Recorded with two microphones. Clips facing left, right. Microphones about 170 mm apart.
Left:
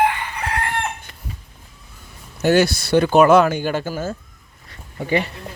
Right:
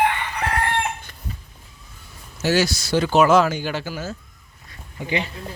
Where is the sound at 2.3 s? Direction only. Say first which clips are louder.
Left 4 dB; 55° left (ahead or behind).